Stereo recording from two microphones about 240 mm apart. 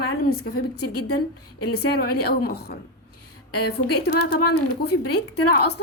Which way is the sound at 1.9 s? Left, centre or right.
Left.